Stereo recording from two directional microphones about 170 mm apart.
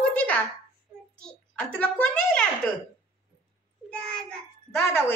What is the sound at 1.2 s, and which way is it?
A child's voice, 10° left (ahead or behind).